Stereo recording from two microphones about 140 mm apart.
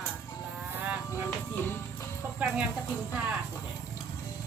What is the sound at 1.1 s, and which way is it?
Music, 15° left (ahead or behind).